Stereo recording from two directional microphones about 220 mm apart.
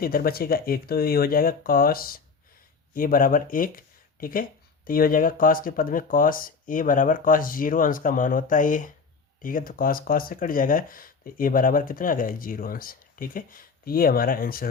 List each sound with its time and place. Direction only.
0.0 s speech: 40° left (ahead or behind)